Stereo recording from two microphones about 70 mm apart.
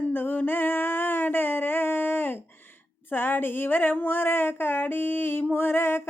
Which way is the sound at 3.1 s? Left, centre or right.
Left.